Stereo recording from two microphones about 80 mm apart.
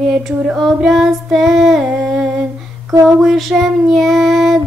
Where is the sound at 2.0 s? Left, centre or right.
Centre.